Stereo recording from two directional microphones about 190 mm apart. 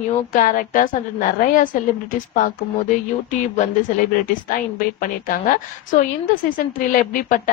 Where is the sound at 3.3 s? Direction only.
40° left (ahead or behind).